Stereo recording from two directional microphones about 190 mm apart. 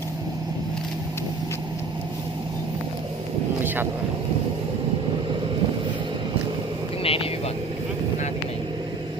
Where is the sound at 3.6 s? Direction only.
10° right (ahead or behind).